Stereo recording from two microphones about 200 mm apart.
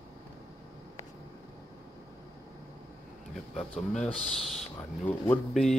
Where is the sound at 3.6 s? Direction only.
5° left (ahead or behind).